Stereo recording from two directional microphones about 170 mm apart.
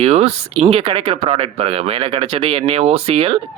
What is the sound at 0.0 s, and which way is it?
Speech, 35° right (ahead or behind).